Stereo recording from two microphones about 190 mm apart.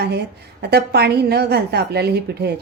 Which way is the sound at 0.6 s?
60° right (ahead or behind).